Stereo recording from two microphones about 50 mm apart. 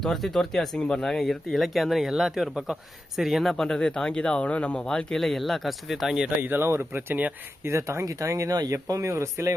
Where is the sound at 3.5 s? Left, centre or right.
Centre.